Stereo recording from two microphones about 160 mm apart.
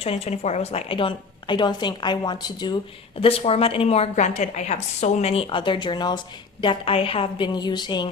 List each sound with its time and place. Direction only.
0.0 s a woman's voice: 40° left (ahead or behind)